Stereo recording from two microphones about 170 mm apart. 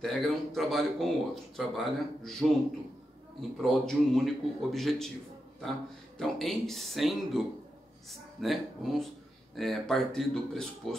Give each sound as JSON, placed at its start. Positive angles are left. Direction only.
{"t": 0.0, "sound": "speech", "side_deg": 0}
{"t": 3.3, "sound": "speech", "side_deg": 0}
{"t": 6.1, "sound": "speech", "side_deg": 0}